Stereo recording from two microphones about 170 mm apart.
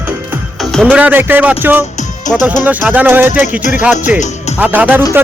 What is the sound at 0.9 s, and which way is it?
A man's voice, 10° right (ahead or behind).